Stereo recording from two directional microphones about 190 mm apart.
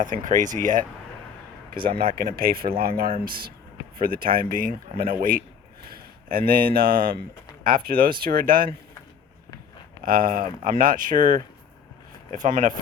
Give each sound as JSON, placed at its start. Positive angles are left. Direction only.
{"t": 0.0, "sound": "speech", "side_deg": -45}
{"t": 1.7, "sound": "speech", "side_deg": -25}
{"t": 2.0, "sound": "speech", "side_deg": -55}
{"t": 10.0, "sound": "speech", "side_deg": -45}